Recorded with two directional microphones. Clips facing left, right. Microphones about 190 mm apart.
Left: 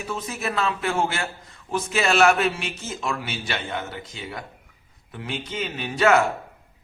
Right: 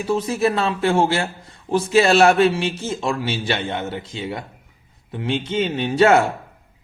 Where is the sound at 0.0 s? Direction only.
30° right (ahead or behind).